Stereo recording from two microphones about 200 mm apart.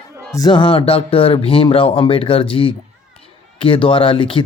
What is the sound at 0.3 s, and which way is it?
Speech, 20° left (ahead or behind).